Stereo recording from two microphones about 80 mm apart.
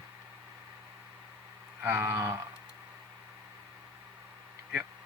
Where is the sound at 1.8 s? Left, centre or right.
Right.